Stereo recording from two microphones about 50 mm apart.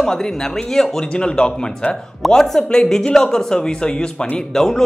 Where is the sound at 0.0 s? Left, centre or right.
Centre.